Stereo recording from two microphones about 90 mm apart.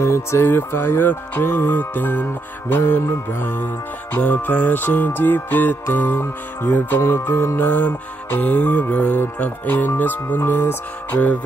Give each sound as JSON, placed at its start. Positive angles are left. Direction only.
{"t": 0.0, "sound": "music", "side_deg": 30}